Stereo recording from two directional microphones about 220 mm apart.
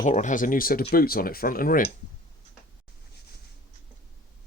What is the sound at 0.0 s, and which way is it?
Speech, 35° left (ahead or behind).